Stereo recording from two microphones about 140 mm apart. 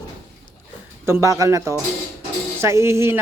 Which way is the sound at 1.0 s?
20° right (ahead or behind).